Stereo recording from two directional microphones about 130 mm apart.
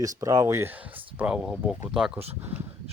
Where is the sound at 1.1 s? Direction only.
5° right (ahead or behind).